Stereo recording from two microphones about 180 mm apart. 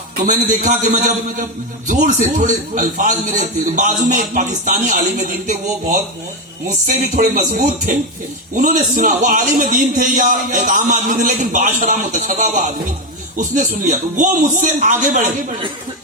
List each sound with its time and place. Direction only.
0.2 s a man's voice: 45° right (ahead or behind)